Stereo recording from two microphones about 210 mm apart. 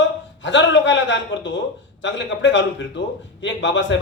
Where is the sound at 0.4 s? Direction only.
60° left (ahead or behind).